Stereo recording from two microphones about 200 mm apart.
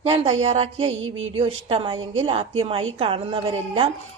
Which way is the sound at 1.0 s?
80° right.